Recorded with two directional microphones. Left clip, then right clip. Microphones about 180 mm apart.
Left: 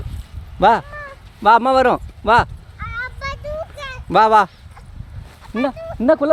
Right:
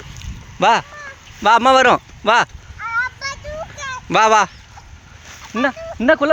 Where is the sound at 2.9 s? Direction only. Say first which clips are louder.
Right 5 dB; 35° left (ahead or behind).